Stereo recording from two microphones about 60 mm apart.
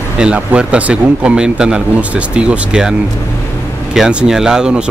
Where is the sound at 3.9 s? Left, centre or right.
Centre.